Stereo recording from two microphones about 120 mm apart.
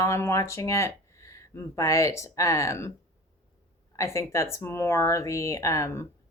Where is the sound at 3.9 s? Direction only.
25° left (ahead or behind).